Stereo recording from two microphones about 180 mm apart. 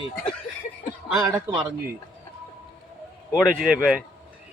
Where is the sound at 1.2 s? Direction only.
20° right (ahead or behind).